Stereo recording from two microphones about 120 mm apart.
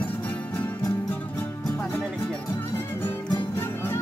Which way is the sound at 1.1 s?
15° left (ahead or behind).